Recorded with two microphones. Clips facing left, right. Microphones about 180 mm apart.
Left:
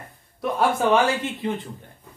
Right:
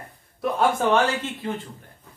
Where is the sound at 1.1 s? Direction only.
15° left (ahead or behind).